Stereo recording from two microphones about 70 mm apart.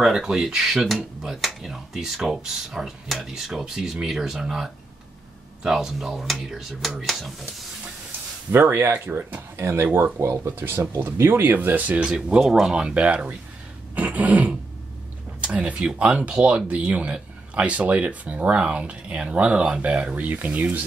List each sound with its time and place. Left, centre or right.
0.0 s speech: centre
8.5 s speech: right; by 13.4 s centre
13.9 s throat clearing: centre
15.4 s speech: centre